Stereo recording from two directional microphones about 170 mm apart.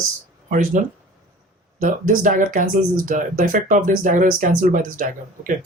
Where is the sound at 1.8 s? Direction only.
50° right (ahead or behind).